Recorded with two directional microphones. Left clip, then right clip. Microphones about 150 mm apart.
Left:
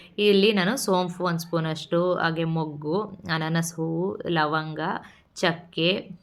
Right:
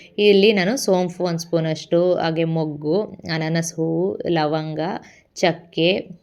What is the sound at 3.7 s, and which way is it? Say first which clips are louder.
A woman's voice: right 7 dB; 5° right (ahead or behind).